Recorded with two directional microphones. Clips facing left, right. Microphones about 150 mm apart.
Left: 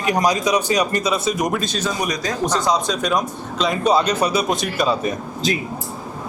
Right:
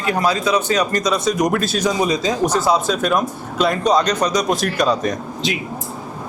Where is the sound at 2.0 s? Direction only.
25° right (ahead or behind).